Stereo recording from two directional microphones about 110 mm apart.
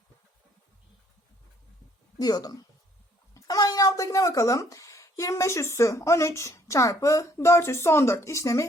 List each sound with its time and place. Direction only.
2.1 s speech: 35° left (ahead or behind)